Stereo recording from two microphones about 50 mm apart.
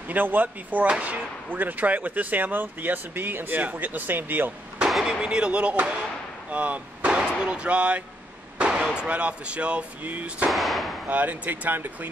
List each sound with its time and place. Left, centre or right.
0.1 s speech: right
4.8 s speech: centre; by 7.2 s right
7.2 s speech: centre
10.5 s speech: centre
11.1 s speech: right